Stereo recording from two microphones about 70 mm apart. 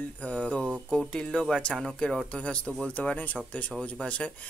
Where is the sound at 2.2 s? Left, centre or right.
Centre.